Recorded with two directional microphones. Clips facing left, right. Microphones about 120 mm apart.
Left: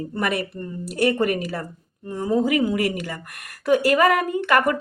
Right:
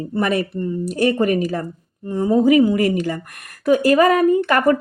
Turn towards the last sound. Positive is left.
turn(degrees=-35)  # may be behind; listen again after turning